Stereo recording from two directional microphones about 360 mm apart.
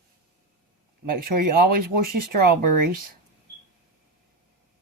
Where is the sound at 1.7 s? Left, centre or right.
Right.